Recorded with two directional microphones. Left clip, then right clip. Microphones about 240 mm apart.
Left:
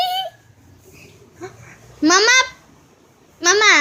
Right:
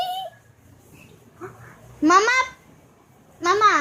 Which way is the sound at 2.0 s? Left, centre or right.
Centre.